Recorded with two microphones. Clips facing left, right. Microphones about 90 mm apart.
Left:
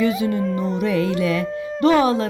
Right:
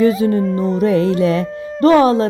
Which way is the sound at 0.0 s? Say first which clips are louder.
Right 6 dB; 35° right (ahead or behind).